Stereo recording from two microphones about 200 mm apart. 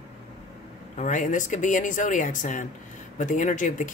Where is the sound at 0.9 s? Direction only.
40° left (ahead or behind).